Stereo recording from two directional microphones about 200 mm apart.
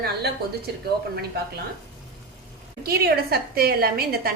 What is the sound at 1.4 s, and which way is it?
Speech, 55° right (ahead or behind).